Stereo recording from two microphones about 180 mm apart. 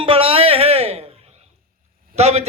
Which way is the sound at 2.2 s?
35° right (ahead or behind).